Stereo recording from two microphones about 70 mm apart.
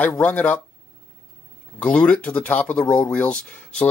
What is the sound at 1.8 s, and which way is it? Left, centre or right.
Speech, centre.